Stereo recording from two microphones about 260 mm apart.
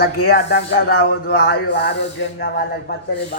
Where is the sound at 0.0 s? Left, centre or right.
Left.